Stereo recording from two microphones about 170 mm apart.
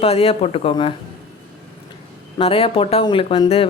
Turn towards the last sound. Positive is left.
turn(degrees=35)  # may be behind; listen again after turning